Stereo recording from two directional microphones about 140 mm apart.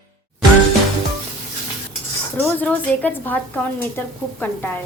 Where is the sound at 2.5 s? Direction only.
10° left (ahead or behind).